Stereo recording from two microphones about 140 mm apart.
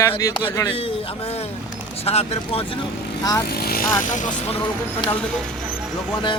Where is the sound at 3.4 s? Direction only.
90° left.